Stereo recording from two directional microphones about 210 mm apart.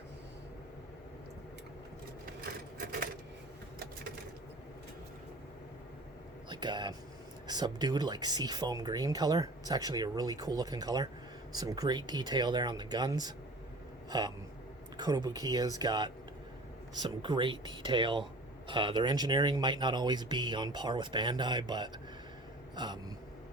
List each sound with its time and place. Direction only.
6.5 s speech: 20° right (ahead or behind)
14.1 s a sound: 20° right (ahead or behind)
14.9 s speech: 20° right (ahead or behind)